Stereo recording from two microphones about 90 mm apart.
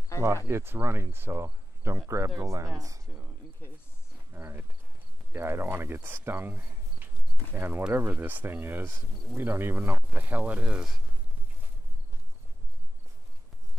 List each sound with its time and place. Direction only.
0.2 s speech: 35° right (ahead or behind)
4.3 s speech: 25° right (ahead or behind); by 11.0 s 10° right (ahead or behind)